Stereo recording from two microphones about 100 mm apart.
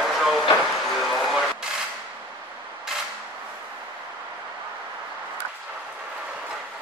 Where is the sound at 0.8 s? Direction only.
Centre (ahead or behind).